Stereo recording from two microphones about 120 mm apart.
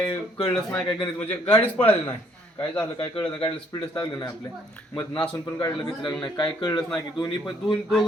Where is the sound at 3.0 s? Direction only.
45° left (ahead or behind).